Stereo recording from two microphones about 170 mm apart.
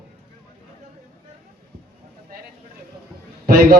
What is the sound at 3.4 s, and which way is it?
Speech, 60° right (ahead or behind).